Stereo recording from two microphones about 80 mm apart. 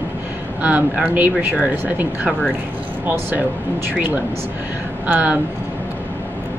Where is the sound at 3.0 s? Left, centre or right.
Right.